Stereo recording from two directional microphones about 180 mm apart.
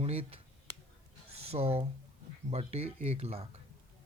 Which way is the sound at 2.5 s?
35° right (ahead or behind).